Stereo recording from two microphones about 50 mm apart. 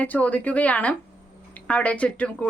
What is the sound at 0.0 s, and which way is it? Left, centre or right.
Speech, left.